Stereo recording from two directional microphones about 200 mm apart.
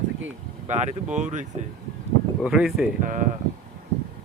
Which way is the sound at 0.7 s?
35° right (ahead or behind).